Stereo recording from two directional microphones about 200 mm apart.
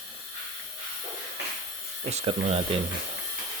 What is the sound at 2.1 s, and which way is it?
Speech, 35° right (ahead or behind).